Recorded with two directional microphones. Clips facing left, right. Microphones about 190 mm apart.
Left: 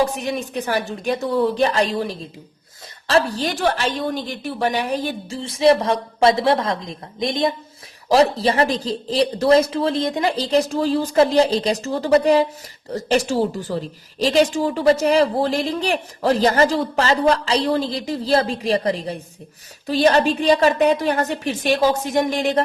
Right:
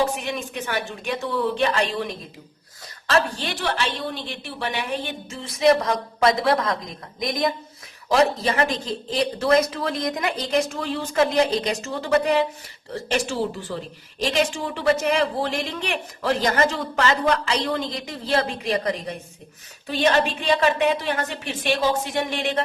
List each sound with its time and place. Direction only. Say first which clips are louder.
0.2 s a woman's voice: left 5 dB; 35° left (ahead or behind)